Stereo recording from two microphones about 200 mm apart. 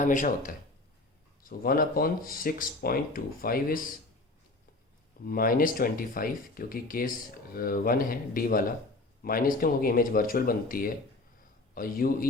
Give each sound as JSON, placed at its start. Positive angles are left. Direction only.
{"t": 0.0, "sound": "speech", "side_deg": 40}
{"t": 5.2, "sound": "speech", "side_deg": 45}